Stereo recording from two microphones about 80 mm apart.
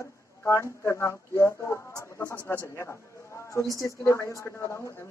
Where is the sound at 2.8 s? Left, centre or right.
Left.